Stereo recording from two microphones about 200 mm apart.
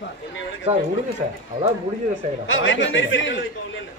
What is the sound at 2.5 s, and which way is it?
Speech, 70° left (ahead or behind).